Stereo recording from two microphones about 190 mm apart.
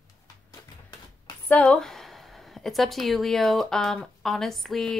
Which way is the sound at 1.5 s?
5° left (ahead or behind).